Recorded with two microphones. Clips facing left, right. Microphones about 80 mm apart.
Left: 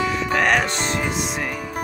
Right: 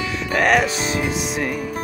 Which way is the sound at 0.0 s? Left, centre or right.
Centre.